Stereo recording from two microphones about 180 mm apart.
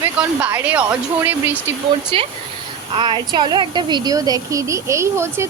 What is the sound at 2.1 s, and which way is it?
A woman's voice, 30° right (ahead or behind).